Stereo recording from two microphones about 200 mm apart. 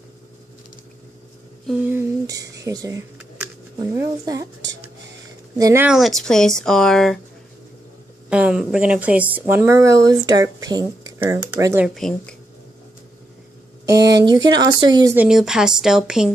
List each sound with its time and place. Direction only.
1.7 s speech: 10° right (ahead or behind)
5.6 s speech: 15° right (ahead or behind)
5.9 s speech: centre (ahead or behind)
8.3 s speech: 5° right (ahead or behind)
11.9 s speech: 5° left (ahead or behind)
14.2 s speech: 20° right (ahead or behind)
15.1 s speech: 5° right (ahead or behind)